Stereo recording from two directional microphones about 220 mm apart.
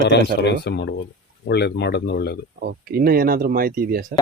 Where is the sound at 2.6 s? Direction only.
45° right (ahead or behind).